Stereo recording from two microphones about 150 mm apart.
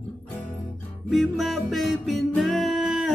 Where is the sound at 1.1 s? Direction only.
Centre (ahead or behind).